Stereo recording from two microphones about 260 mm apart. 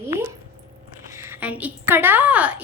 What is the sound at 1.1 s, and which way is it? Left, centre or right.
A woman's voice, centre.